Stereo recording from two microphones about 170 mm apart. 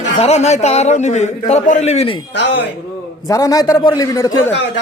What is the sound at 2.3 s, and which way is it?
Speech, 90° left.